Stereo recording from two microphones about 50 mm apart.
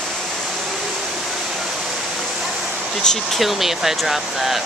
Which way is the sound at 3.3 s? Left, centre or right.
Centre.